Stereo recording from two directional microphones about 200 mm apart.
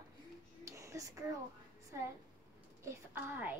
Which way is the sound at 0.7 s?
15° right (ahead or behind).